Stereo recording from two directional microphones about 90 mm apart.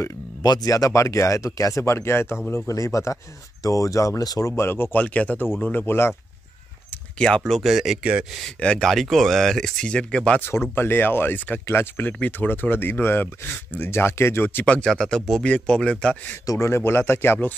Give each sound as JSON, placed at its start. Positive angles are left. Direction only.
{"t": 0.0, "sound": "a sound", "side_deg": 45}
{"t": 0.7, "sound": "speech", "side_deg": 35}
{"t": 4.9, "sound": "a man's voice", "side_deg": 15}
{"t": 6.9, "sound": "speech", "side_deg": 10}
{"t": 8.5, "sound": "speech", "side_deg": 10}
{"t": 10.4, "sound": "a man's voice", "side_deg": 25}
{"t": 16.4, "sound": "speech", "side_deg": 30}